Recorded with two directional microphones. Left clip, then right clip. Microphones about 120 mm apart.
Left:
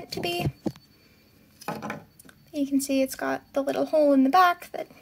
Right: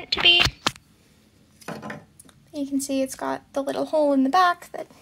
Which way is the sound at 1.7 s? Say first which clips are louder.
Left 1 dB; 15° left (ahead or behind).